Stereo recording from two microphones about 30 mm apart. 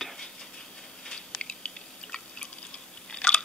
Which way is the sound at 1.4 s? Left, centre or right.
Left.